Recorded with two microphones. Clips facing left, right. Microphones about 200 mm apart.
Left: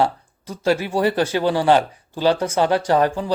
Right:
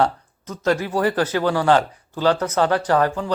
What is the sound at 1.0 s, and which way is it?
Speech, 25° left (ahead or behind).